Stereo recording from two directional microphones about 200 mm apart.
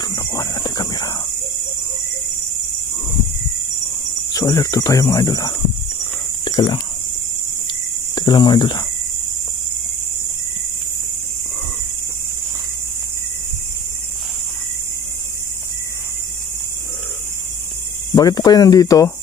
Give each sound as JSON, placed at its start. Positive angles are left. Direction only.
{"t": 0.0, "sound": "a sound", "side_deg": 20}
{"t": 4.3, "sound": "speech", "side_deg": 15}
{"t": 6.4, "sound": "cricket", "side_deg": 20}
{"t": 8.1, "sound": "cricket", "side_deg": 20}
{"t": 18.1, "sound": "speech", "side_deg": 20}